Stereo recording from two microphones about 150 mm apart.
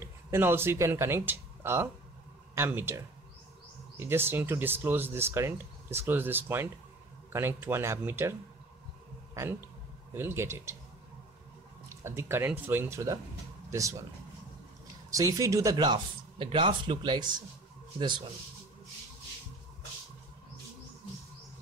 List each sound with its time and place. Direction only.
0.0 s speech: 15° right (ahead or behind)
4.0 s speech: 15° right (ahead or behind)
12.0 s speech: 15° right (ahead or behind)
15.0 s speech: 20° right (ahead or behind)